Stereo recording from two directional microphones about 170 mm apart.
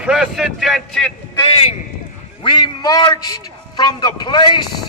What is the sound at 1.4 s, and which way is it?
A man's voice, 30° left (ahead or behind).